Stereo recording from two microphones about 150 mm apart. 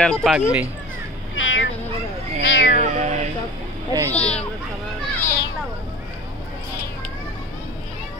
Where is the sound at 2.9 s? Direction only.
50° right (ahead or behind).